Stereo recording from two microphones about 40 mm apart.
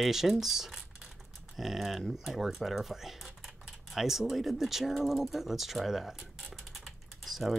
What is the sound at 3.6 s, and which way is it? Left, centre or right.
Typing, centre.